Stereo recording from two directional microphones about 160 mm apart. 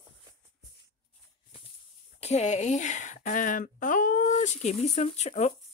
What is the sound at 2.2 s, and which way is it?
A woman's voice, 45° left (ahead or behind).